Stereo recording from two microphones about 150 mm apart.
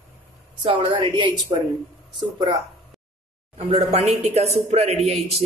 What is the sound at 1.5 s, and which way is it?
Speech, 25° right (ahead or behind).